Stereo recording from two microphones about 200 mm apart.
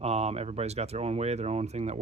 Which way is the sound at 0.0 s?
30° right (ahead or behind).